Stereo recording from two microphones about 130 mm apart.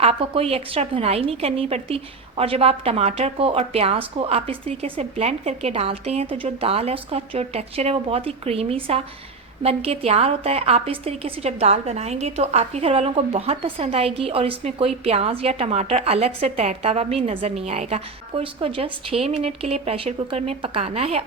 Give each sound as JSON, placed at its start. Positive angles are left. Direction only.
{"t": 0.0, "sound": "a woman's voice", "side_deg": -50}